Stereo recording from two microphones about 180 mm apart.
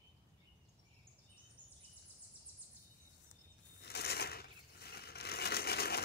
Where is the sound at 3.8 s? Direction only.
65° left (ahead or behind).